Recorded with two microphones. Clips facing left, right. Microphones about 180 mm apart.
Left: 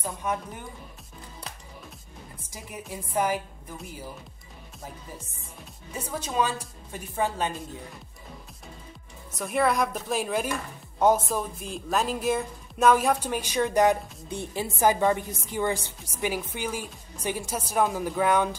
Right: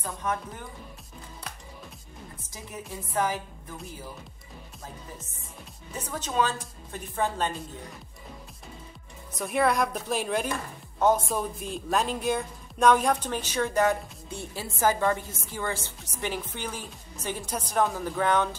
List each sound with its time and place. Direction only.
0.0 s a woman's voice: 10° left (ahead or behind)
2.5 s a woman's voice: 10° left (ahead or behind)
5.9 s a woman's voice: 10° left (ahead or behind)
9.3 s a woman's voice: centre (ahead or behind)